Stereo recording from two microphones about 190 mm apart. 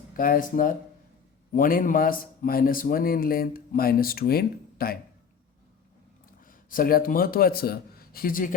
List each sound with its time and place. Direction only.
0.2 s a man's voice: 45° left (ahead or behind)
6.7 s a man's voice: 50° left (ahead or behind)